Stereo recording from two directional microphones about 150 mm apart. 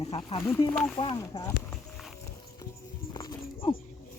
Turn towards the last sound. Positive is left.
turn(degrees=30)  # may be behind; listen again after turning